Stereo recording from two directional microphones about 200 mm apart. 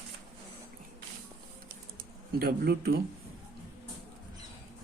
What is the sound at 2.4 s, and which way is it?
Speech, 50° right (ahead or behind).